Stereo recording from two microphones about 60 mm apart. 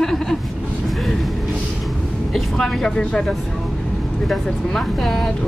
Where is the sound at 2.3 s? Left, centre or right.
Centre.